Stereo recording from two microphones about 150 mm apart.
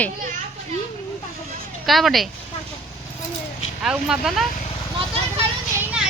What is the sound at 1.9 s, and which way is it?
Speech, centre (ahead or behind).